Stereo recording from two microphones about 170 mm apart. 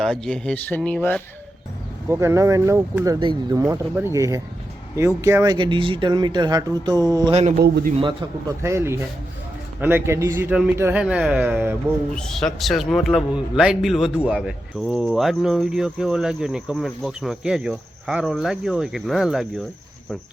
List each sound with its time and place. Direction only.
0.0 s a man's voice: 5° left (ahead or behind)
2.0 s a man's voice: 15° right (ahead or behind)
3.6 s a man's voice: 15° right (ahead or behind)
7.5 s a man's voice: 65° right (ahead or behind)
8.6 s a man's voice: 15° right (ahead or behind)
12.1 s a man's voice: 5° left (ahead or behind)